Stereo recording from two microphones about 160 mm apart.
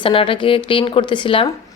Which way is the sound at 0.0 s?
35° left (ahead or behind).